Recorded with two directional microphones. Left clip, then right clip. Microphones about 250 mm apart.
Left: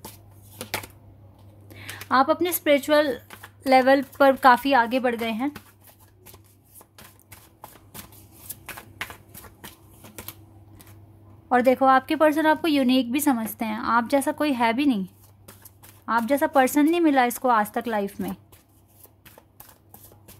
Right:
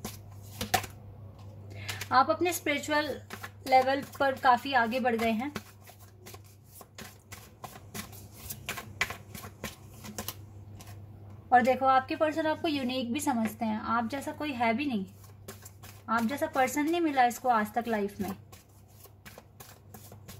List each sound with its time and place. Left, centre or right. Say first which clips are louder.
1.7 s a woman's voice: left 5 dB; left
11.4 s a woman's voice: left 5 dB; left
16.1 s speech: left 8 dB; left